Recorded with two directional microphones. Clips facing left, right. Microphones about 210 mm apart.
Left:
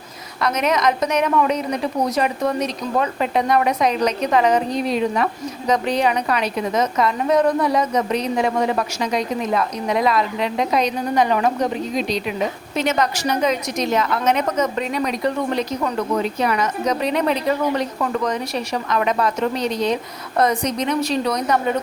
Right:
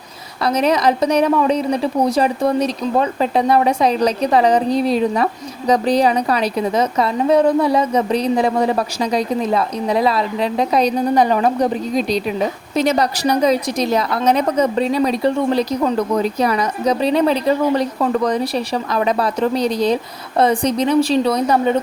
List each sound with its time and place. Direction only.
0.4 s a woman's voice: 30° right (ahead or behind)